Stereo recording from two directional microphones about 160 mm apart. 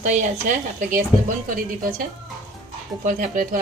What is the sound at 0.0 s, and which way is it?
A woman's voice, 50° right (ahead or behind).